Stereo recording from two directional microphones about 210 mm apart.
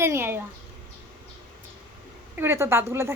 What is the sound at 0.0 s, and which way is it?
Speech, 10° right (ahead or behind).